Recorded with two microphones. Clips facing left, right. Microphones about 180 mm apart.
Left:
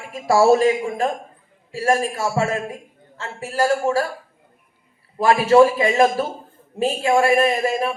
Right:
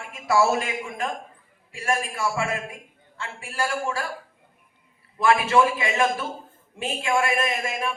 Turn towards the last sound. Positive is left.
turn(degrees=35)  # may be behind; listen again after turning